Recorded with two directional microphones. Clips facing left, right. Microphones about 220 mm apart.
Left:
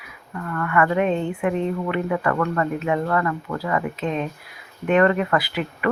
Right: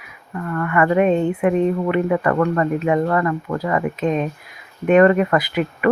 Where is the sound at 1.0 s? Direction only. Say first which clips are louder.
Right 5 dB; 45° right (ahead or behind).